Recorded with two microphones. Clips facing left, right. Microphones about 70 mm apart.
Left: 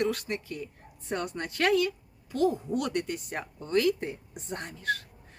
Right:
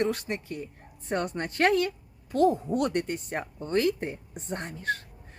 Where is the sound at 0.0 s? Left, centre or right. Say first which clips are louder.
Right 1 dB; right.